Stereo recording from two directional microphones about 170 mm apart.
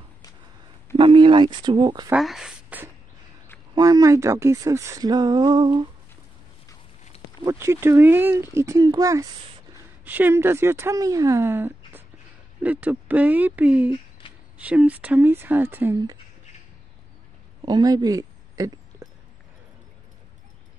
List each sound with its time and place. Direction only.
0.9 s speech: 30° right (ahead or behind)
2.1 s speech: centre (ahead or behind)
3.7 s speech: 20° right (ahead or behind)
7.4 s speech: 15° right (ahead or behind)
17.6 s a sound: 25° right (ahead or behind)